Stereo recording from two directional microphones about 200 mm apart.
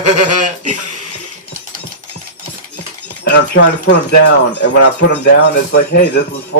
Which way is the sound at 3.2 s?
60° left (ahead or behind).